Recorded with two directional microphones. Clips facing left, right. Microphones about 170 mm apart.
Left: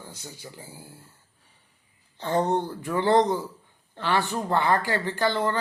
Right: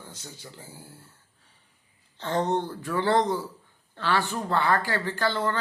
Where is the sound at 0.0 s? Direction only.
10° left (ahead or behind).